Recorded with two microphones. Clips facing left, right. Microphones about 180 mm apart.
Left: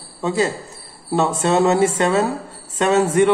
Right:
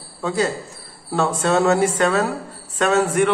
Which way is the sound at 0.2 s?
20° left (ahead or behind).